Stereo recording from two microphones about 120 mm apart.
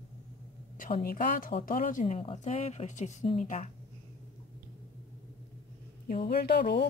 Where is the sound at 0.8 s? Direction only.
90° left.